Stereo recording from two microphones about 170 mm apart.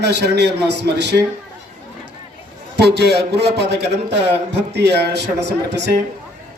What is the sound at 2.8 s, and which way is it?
A man's voice, 75° right (ahead or behind).